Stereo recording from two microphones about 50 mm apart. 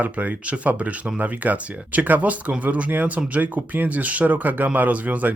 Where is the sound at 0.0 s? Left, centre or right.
Right.